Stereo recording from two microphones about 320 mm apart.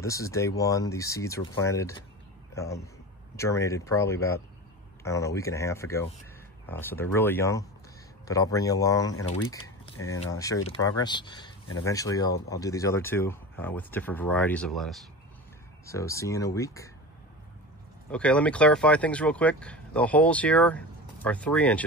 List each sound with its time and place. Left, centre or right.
0.0 s a man's voice: centre
9.9 s speech: left
10.2 s speech: centre
18.1 s speech: centre